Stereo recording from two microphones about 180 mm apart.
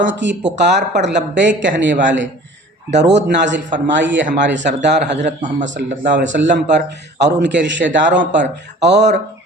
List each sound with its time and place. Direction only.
0.0 s speech: 85° right
3.0 s a man's voice: 70° right (ahead or behind)
5.2 s a man's voice: 40° right (ahead or behind)
6.1 s a man's voice: 80° right